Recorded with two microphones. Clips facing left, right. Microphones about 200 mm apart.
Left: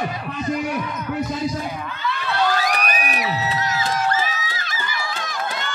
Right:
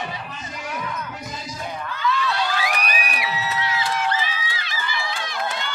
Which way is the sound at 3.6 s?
40° left (ahead or behind).